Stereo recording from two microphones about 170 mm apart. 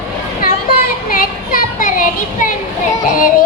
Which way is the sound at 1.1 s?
55° left (ahead or behind).